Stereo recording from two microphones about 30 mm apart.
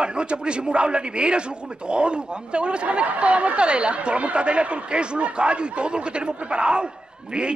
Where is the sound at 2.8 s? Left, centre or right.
Right.